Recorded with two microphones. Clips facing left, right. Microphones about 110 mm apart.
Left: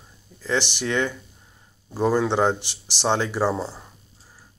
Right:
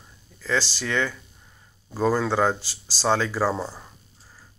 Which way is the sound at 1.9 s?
15° left (ahead or behind).